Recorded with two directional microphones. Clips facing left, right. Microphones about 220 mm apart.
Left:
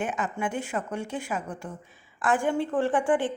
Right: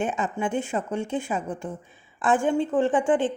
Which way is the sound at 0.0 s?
25° right (ahead or behind).